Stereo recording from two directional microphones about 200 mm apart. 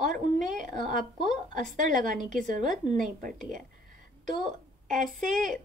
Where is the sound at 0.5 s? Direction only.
40° right (ahead or behind).